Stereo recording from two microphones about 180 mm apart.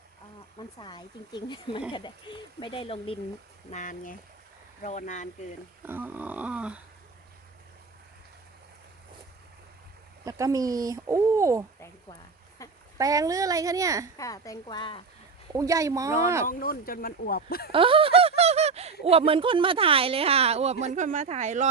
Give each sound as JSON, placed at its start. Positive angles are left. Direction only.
{"t": 0.8, "sound": "speech", "side_deg": 25}
{"t": 3.7, "sound": "speech", "side_deg": 45}
{"t": 5.8, "sound": "a sound", "side_deg": -10}
{"t": 10.2, "sound": "speech", "side_deg": -20}
{"t": 12.6, "sound": "a sound", "side_deg": 20}
{"t": 13.0, "sound": "speech", "side_deg": -20}
{"t": 14.2, "sound": "speech", "side_deg": 20}
{"t": 15.5, "sound": "speech", "side_deg": -20}
{"t": 16.5, "sound": "speech", "side_deg": 55}
{"t": 17.7, "sound": "a sound", "side_deg": -30}
{"t": 19.0, "sound": "speech", "side_deg": -30}